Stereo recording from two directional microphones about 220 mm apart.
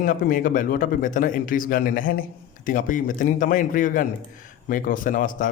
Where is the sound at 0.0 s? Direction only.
40° left (ahead or behind).